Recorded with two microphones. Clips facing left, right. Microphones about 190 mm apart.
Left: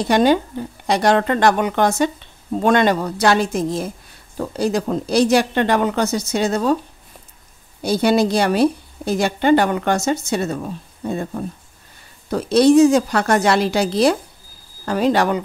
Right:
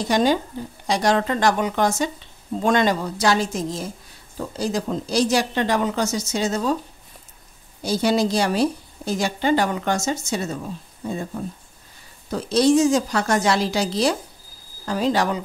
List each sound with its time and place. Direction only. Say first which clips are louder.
0.1 s a woman's voice: left 4 dB; 60° left (ahead or behind)
7.8 s a woman's voice: left 4 dB; 60° left (ahead or behind)